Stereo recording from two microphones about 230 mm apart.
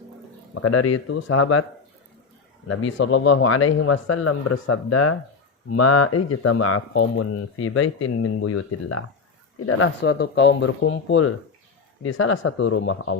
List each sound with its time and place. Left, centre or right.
0.5 s speech: left
2.6 s speech: left
9.6 s speech: left